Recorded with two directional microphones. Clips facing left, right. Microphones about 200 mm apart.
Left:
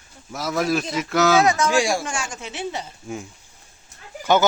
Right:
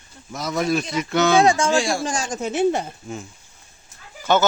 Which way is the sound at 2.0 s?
35° right (ahead or behind).